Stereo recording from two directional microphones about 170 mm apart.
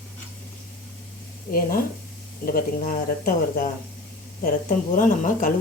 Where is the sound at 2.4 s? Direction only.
55° left (ahead or behind).